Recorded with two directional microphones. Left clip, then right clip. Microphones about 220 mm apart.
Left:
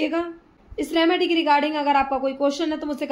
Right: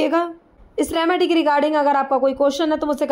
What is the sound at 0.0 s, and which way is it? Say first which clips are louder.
A woman's voice: right 6 dB; 35° right (ahead or behind).